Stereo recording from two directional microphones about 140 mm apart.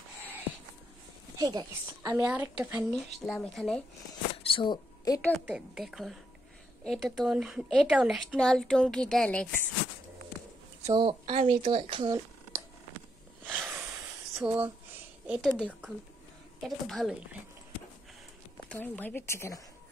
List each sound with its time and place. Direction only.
1.4 s a woman's voice: 30° right (ahead or behind)
2.2 s a woman's voice: 10° right (ahead or behind)
2.9 s a woman's voice: centre (ahead or behind)
4.4 s a sound: 40° left (ahead or behind)
5.1 s a woman's voice: 25° left (ahead or behind)
5.4 s a woman's voice: 5° right (ahead or behind)
10.9 s speech: 35° right (ahead or behind)
13.5 s a sound: 10° right (ahead or behind)
14.3 s a woman's voice: 5° right (ahead or behind)
16.6 s a woman's voice: centre (ahead or behind)
18.7 s speech: 10° left (ahead or behind)